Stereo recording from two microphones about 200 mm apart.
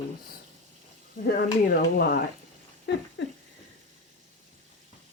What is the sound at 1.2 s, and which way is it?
Speech, 50° left (ahead or behind).